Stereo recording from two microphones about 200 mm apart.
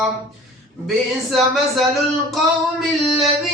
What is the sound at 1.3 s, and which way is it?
Speech, centre (ahead or behind).